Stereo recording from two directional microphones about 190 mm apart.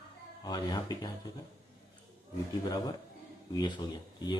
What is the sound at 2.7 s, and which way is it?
Speech, 20° left (ahead or behind).